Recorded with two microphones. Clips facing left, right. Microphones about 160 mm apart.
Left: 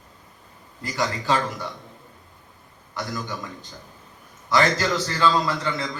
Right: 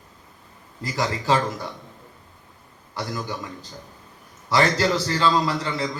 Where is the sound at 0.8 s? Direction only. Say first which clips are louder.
Right 1 dB; 35° right (ahead or behind).